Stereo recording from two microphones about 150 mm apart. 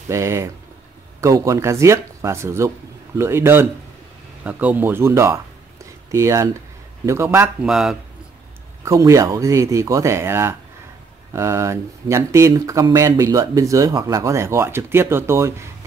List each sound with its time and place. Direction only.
0.1 s speech: 20° right (ahead or behind)
7.6 s a man's voice: 5° right (ahead or behind)
8.8 s speech: 20° right (ahead or behind)